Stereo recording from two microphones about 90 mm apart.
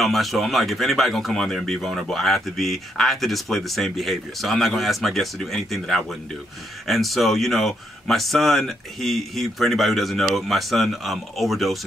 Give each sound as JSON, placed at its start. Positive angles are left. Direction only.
{"t": 0.0, "sound": "speech", "side_deg": 0}